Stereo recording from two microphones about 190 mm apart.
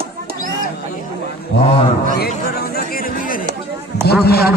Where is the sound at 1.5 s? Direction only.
65° left (ahead or behind).